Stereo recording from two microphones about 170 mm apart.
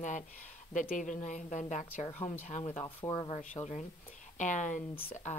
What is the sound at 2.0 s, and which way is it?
Speech, 10° left (ahead or behind).